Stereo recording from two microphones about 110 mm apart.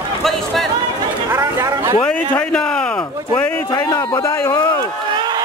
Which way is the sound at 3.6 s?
40° left (ahead or behind).